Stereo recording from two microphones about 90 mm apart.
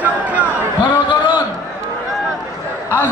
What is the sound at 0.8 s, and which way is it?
Basketball bounce, 60° left (ahead or behind).